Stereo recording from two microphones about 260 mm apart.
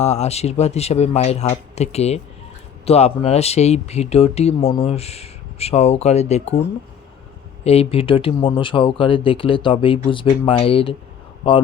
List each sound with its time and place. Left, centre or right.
0.0 s speech: left
7.6 s speech: left